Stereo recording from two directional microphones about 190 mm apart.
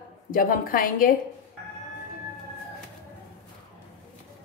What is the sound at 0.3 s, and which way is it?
Speech, 45° left (ahead or behind).